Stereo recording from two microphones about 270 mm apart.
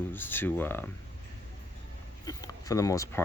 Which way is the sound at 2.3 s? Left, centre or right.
Centre.